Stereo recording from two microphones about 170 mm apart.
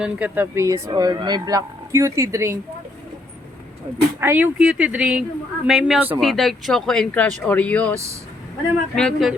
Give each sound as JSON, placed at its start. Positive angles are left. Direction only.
{"t": 0.0, "sound": "speech", "side_deg": -10}
{"t": 4.2, "sound": "speech", "side_deg": -10}
{"t": 9.0, "sound": "speech", "side_deg": 0}